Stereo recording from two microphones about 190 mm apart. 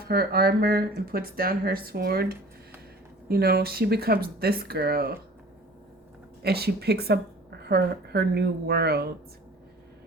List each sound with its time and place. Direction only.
0.0 s speech: 55° right (ahead or behind)
6.4 s speech: 55° right (ahead or behind)